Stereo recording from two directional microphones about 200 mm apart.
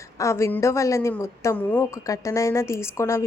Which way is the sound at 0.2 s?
15° left (ahead or behind).